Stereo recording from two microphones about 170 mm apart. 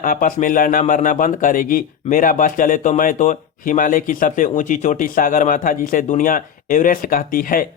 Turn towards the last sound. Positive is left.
turn(degrees=55)  # may be behind; listen again after turning